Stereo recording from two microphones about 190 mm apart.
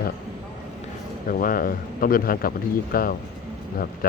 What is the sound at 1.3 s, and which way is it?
Speech, 45° left (ahead or behind).